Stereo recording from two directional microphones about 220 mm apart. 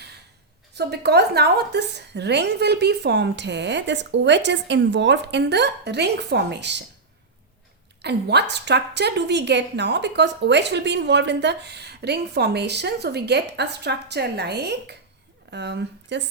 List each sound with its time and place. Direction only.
0.7 s a woman's voice: 50° right (ahead or behind)
8.0 s a woman's voice: 50° right (ahead or behind)